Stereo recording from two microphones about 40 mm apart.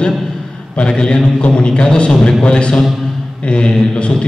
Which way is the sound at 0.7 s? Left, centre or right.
Left.